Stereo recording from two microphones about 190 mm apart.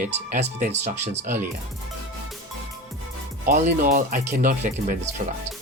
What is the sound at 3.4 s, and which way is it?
Speech, 45° right (ahead or behind).